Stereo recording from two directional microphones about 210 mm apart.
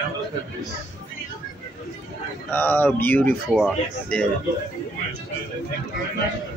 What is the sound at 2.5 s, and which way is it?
Speech, 10° left (ahead or behind).